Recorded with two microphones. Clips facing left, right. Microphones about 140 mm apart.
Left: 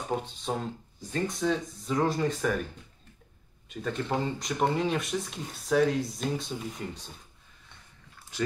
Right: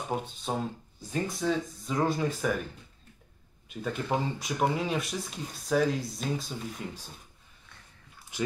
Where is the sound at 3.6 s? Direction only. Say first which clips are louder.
Even; 10° right (ahead or behind).